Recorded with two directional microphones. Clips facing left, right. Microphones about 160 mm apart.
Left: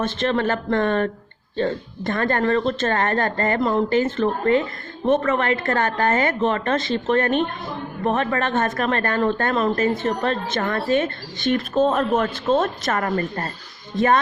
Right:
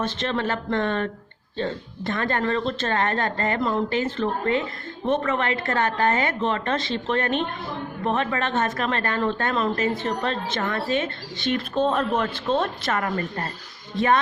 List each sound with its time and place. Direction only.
0.2 s speech: 50° left (ahead or behind)
6.7 s speech: 30° right (ahead or behind)
7.1 s speech: 50° left (ahead or behind)